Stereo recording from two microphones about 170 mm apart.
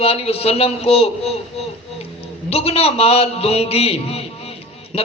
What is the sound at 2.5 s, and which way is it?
A man's voice, 35° left (ahead or behind).